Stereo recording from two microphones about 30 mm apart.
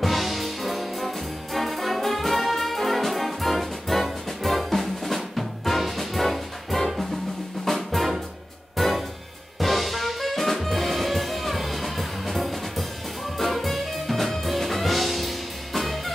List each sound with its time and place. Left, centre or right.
0.0 s music: centre